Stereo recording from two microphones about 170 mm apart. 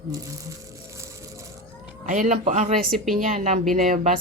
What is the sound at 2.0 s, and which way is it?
A woman's voice, 45° right (ahead or behind).